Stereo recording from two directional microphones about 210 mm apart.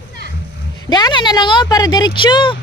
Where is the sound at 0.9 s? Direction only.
20° left (ahead or behind).